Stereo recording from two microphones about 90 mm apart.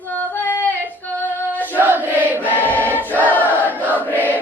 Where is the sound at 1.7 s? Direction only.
20° right (ahead or behind).